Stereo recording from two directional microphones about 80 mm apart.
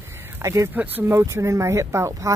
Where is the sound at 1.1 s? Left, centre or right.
Right.